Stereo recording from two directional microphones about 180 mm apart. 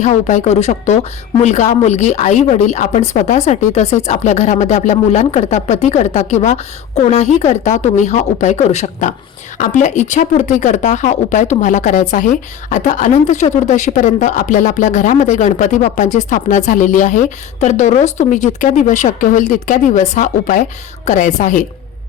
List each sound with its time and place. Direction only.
0.0 s speech: 40° left (ahead or behind)